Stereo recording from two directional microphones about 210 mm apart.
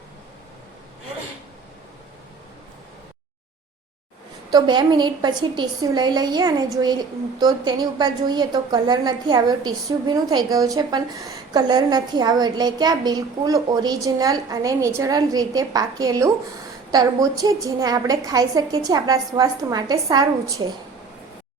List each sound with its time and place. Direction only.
4.5 s a woman's voice: 20° right (ahead or behind)